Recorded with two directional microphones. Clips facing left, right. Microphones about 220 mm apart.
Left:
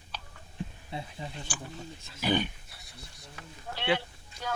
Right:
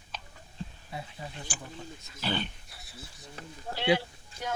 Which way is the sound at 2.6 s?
Centre (ahead or behind).